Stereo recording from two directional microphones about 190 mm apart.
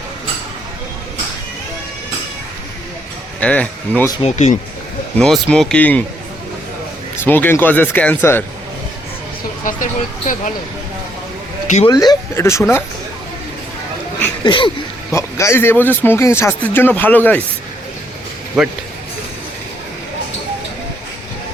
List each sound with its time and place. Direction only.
3.4 s speech: 5° left (ahead or behind)
4.2 s speech: 35° left (ahead or behind)
5.1 s speech: 5° left (ahead or behind)
7.2 s speech: 10° left (ahead or behind)
9.6 s speech: 45° left (ahead or behind)
11.9 s speech: 20° left (ahead or behind)
14.4 s speech: 25° left (ahead or behind)
15.1 s speech: 15° left (ahead or behind)